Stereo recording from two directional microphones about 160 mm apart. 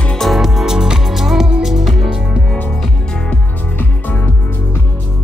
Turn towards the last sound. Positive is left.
turn(degrees=10)  # may be behind; listen again after turning